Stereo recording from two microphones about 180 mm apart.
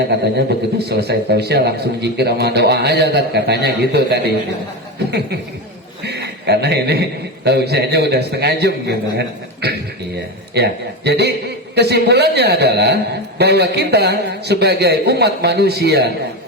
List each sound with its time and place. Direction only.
0.3 s a man's voice: 65° right (ahead or behind)
6.0 s a man's voice: 65° right (ahead or behind)